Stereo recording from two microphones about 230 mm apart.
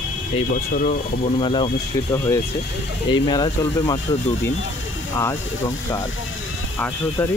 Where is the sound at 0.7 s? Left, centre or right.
Left.